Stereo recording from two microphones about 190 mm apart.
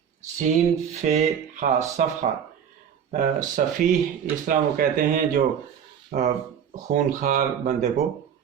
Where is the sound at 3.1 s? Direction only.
45° right (ahead or behind).